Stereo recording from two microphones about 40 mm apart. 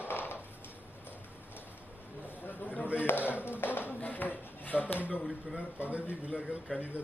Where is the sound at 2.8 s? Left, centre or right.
Right.